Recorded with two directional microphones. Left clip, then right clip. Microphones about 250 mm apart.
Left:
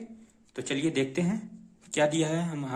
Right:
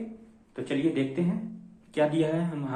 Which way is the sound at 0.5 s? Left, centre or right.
Left.